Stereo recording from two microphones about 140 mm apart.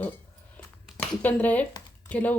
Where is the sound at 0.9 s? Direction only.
Centre (ahead or behind).